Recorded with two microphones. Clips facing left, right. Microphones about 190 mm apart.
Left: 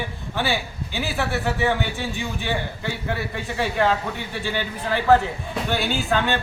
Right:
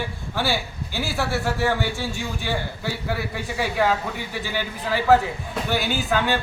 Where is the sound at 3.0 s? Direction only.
5° right (ahead or behind).